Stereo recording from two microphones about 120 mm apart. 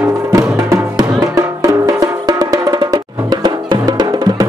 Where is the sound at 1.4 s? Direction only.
30° right (ahead or behind).